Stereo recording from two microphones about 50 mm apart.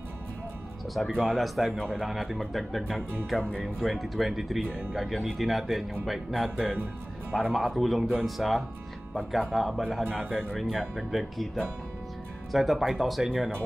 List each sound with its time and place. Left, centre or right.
1.2 s speech: centre
12.5 s speech: centre